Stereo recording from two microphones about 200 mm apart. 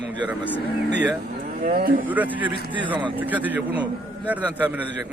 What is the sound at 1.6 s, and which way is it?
Speech, 45° right (ahead or behind).